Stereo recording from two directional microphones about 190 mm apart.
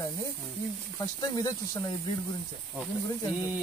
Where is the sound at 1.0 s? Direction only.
20° left (ahead or behind).